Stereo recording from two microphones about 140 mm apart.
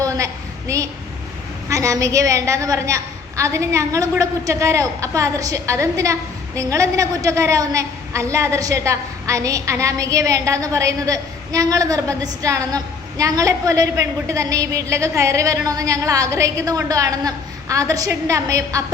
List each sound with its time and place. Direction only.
0.7 s a woman's voice: 20° right (ahead or behind)